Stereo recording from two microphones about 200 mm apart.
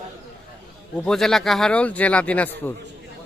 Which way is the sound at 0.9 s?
5° left (ahead or behind).